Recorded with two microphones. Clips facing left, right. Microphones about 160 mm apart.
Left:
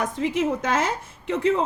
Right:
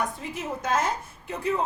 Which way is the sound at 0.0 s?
90° left.